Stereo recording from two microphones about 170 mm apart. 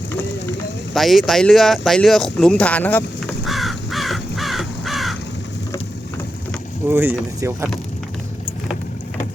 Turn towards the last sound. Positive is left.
turn(degrees=-15)  # may be behind; listen again after turning